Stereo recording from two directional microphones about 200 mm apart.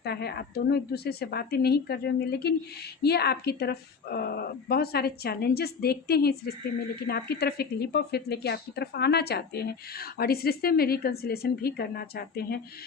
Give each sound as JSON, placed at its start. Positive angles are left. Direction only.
{"t": 0.0, "sound": "a woman's voice", "side_deg": 55}